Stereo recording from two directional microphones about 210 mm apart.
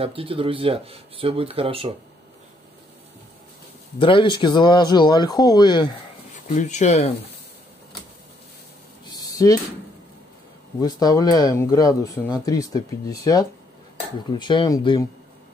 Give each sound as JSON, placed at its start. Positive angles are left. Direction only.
{"t": 0.0, "sound": "speech", "side_deg": -25}
{"t": 4.0, "sound": "speech", "side_deg": 25}
{"t": 6.4, "sound": "speech", "side_deg": 35}
{"t": 9.1, "sound": "a sound", "side_deg": 15}
{"t": 10.8, "sound": "speech", "side_deg": 20}